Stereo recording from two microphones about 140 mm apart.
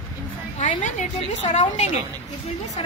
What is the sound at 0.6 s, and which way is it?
A woman's voice, 60° left (ahead or behind).